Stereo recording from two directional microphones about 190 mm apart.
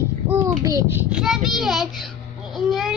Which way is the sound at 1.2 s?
Centre (ahead or behind).